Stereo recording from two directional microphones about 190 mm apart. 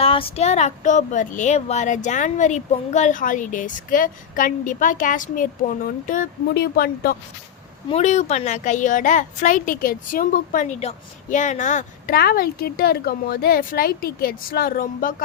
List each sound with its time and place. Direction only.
0.0 s a sound: 30° left (ahead or behind)
6.5 s a woman's voice: 50° left (ahead or behind)
7.9 s a woman's voice: 35° left (ahead or behind)